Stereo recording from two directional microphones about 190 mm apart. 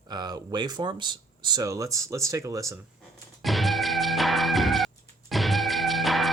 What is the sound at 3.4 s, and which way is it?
Music, centre (ahead or behind).